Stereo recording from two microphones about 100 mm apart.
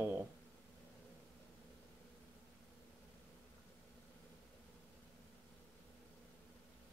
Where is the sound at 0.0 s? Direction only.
20° right (ahead or behind).